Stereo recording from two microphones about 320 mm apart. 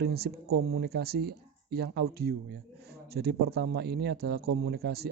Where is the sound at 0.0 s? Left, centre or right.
Right.